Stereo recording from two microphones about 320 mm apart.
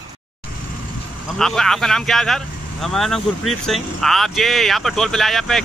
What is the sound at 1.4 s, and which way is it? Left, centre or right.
Speech, centre.